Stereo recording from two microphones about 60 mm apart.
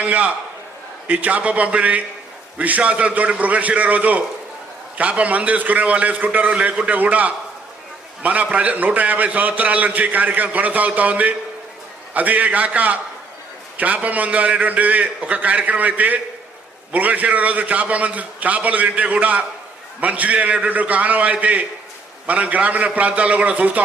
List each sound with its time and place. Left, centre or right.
0.0 s a man's voice: right